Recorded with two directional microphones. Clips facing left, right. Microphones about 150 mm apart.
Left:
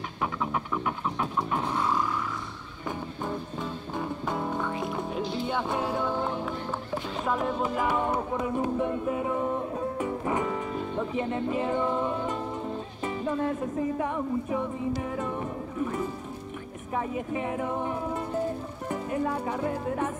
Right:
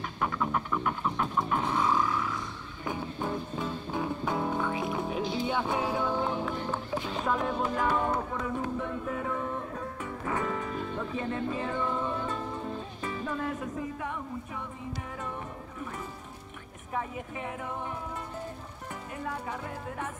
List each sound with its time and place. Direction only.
0.2 s music: 5° left (ahead or behind); by 15.2 s 25° left (ahead or behind)
18.9 s speech: 30° left (ahead or behind)